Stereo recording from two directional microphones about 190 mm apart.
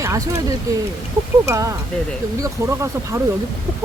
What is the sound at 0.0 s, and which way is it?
Speech, 15° right (ahead or behind).